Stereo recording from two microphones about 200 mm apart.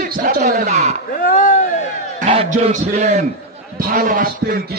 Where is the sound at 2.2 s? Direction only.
35° right (ahead or behind).